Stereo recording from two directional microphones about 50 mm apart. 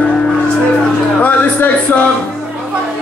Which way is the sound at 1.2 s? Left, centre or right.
Left.